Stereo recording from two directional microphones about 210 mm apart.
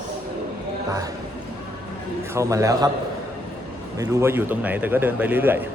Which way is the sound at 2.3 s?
15° right (ahead or behind).